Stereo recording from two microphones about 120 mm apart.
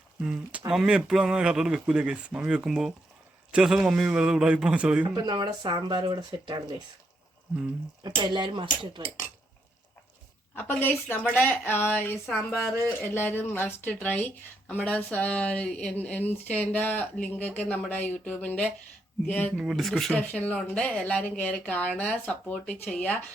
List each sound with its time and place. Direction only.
0.2 s a man's voice: 5° right (ahead or behind)
5.0 s speech: 35° right (ahead or behind)
8.0 s speech: 40° right (ahead or behind)
10.5 s speech: 15° left (ahead or behind)
19.5 s speech: centre (ahead or behind)